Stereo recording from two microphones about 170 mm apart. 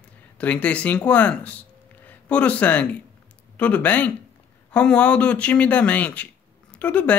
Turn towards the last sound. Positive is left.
turn(degrees=10)  # may be behind; listen again after turning